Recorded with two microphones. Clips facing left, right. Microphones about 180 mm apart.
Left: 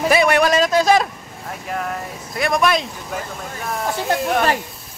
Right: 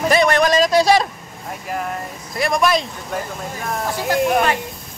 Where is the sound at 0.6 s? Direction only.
30° right (ahead or behind).